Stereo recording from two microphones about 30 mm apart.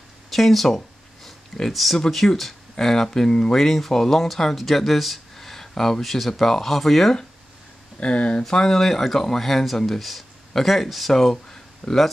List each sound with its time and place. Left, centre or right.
0.3 s speech: centre
2.7 s speech: centre
6.0 s speech: centre
8.0 s speech: left
8.5 s speech: centre